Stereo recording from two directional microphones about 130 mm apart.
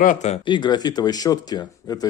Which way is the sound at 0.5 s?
35° left (ahead or behind).